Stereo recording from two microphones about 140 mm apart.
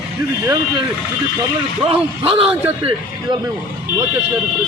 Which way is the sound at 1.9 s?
40° right (ahead or behind).